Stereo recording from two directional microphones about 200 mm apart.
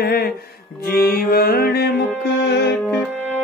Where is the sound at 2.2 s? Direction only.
55° left (ahead or behind).